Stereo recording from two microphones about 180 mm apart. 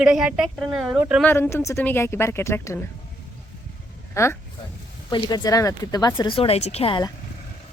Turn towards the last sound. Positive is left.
turn(degrees=25)  # may be behind; listen again after turning